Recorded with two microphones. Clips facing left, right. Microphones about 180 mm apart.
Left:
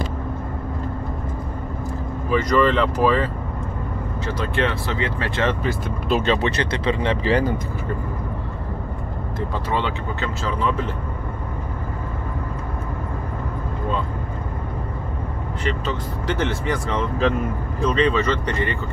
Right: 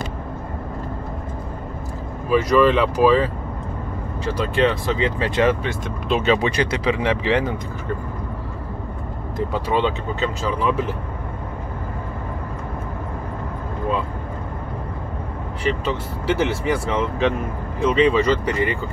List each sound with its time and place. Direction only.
2.3 s speech: 5° right (ahead or behind)
4.3 s speech: 15° right (ahead or behind)
5.6 s speech: 5° left (ahead or behind)
6.3 s speech: 10° right (ahead or behind)
9.7 s speech: 20° right (ahead or behind)
15.6 s speech: 10° right (ahead or behind)